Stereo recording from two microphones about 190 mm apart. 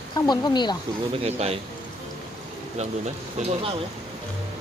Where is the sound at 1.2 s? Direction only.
35° right (ahead or behind).